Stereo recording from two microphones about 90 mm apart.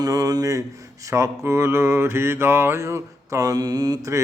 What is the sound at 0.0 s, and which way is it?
Mantra, 40° right (ahead or behind).